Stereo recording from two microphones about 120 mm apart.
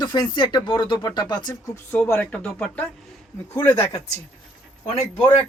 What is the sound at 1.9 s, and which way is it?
Speech, 15° left (ahead or behind).